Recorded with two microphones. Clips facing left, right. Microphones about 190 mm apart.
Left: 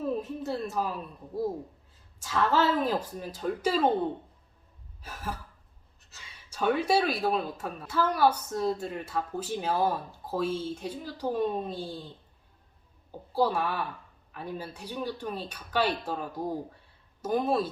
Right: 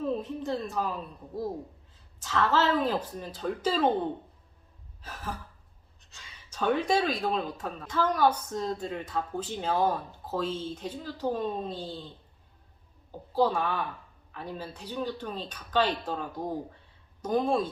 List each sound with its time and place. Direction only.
0.0 s speech: 10° left (ahead or behind)
2.1 s speech: 10° left (ahead or behind)
5.0 s speech: 10° left (ahead or behind)
13.1 s a woman's voice: 10° left (ahead or behind)